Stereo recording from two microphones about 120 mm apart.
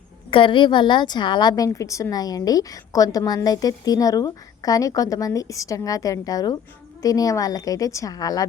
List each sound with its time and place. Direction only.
0.3 s a woman's voice: 45° left (ahead or behind)